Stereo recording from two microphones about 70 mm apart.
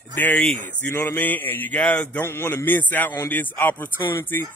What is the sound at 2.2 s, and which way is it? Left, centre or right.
Speech, left.